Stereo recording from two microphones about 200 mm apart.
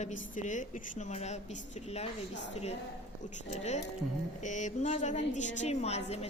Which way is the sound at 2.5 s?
30° left (ahead or behind).